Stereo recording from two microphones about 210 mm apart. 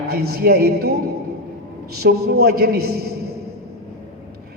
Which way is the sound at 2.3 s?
50° right (ahead or behind).